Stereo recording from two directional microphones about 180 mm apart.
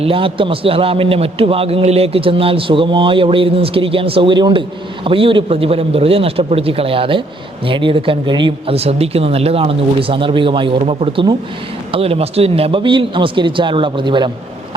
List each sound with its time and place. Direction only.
0.0 s a man's voice: 30° right (ahead or behind)